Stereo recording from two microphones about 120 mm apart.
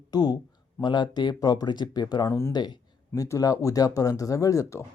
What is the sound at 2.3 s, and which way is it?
Speech, 25° left (ahead or behind).